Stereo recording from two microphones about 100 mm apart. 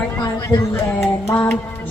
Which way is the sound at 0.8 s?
25° left (ahead or behind).